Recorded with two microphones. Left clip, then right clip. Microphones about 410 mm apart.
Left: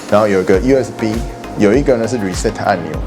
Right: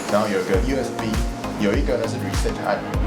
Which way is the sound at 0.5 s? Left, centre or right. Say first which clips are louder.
Left 10 dB; left.